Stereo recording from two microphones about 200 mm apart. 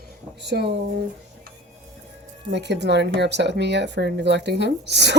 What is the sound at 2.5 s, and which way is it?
Speech, 60° right (ahead or behind).